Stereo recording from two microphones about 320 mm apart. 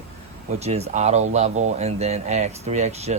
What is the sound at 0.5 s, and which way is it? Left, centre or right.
Speech, centre.